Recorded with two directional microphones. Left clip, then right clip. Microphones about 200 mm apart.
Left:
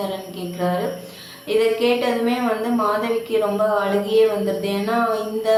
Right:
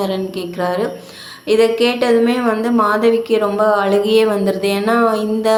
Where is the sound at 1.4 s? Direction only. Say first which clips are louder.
Right 5 dB; 35° right (ahead or behind).